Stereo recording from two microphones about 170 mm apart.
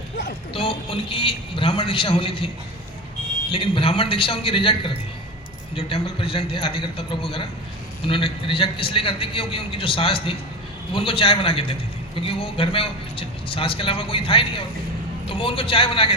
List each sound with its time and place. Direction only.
0.5 s a man's voice: 35° left (ahead or behind)
3.5 s a man's voice: 35° left (ahead or behind)